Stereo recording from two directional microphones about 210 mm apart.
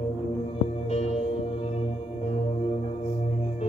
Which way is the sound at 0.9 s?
30° left (ahead or behind).